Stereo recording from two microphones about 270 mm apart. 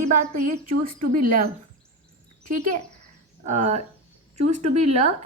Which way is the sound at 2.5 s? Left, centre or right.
Right.